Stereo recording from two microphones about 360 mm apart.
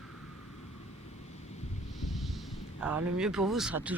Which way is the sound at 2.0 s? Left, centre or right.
Centre.